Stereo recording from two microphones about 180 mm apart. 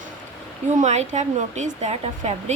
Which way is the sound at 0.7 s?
40° right (ahead or behind).